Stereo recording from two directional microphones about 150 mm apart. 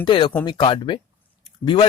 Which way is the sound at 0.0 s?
35° left (ahead or behind).